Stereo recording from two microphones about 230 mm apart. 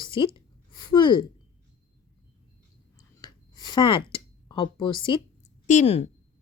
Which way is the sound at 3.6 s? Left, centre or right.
Centre.